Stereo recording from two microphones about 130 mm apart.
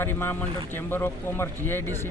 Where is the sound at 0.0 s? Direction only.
15° left (ahead or behind).